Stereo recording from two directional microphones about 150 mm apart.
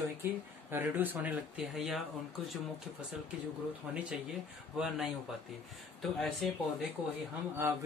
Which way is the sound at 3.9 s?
5° right (ahead or behind).